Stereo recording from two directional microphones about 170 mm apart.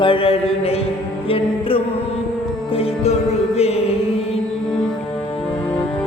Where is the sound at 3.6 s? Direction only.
35° left (ahead or behind).